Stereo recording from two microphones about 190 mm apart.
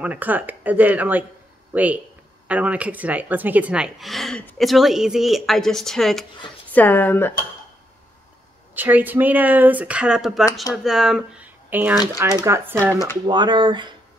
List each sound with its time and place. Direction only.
0.0 s speech: 10° right (ahead or behind); by 7.3 s 10° left (ahead or behind)
8.7 s speech: 10° right (ahead or behind)